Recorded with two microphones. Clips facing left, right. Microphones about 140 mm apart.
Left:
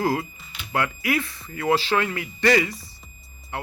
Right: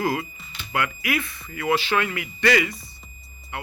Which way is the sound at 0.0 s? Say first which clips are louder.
Left 1 dB; 30° left (ahead or behind).